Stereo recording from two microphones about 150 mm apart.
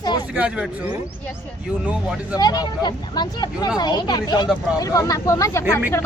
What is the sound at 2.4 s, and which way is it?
Speech, 25° left (ahead or behind).